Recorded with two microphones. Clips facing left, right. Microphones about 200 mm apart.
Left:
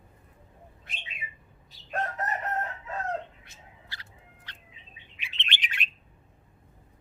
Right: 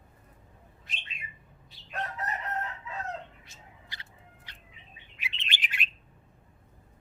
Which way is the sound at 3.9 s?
15° right (ahead or behind).